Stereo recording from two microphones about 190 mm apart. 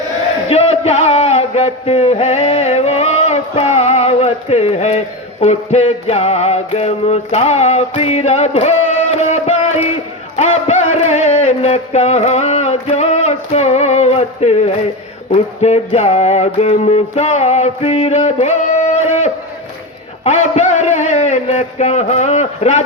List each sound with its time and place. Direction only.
0.4 s a man's voice: 35° left (ahead or behind)
10.3 s a sound: 35° left (ahead or behind)
20.2 s a man's voice: 35° left (ahead or behind)